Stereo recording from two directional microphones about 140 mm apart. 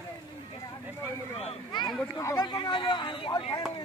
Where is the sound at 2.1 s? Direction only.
25° left (ahead or behind).